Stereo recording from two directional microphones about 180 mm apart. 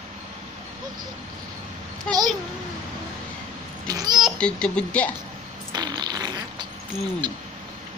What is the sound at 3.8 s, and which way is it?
Babbling, 20° right (ahead or behind).